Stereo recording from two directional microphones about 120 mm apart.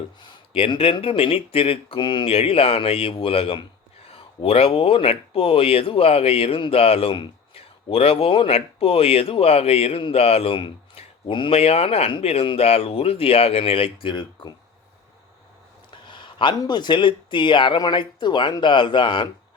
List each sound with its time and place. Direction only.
0.5 s speech: 55° left (ahead or behind)
15.9 s a sound: 40° left (ahead or behind)
16.6 s speech: 40° left (ahead or behind)